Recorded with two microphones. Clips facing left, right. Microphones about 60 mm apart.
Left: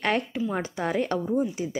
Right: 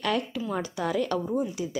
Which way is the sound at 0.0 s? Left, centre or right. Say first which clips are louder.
Left 2 dB; left.